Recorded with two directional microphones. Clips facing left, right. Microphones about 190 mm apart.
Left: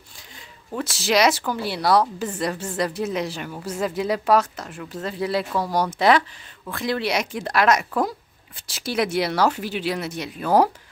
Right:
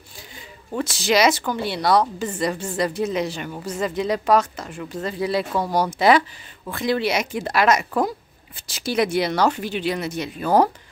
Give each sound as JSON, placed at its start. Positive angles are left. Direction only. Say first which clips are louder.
{"t": 0.7, "sound": "a woman's voice", "louder": "right 2 dB", "side_deg": 0}